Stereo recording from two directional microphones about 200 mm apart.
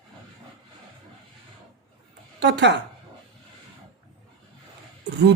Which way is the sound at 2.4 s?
60° right (ahead or behind).